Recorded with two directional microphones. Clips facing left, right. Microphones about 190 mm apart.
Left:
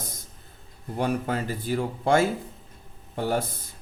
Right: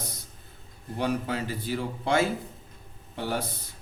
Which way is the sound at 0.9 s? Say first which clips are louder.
Left 2 dB; 50° left (ahead or behind).